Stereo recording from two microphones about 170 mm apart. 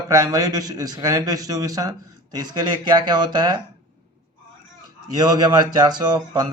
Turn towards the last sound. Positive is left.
turn(degrees=-25)  # may be behind; listen again after turning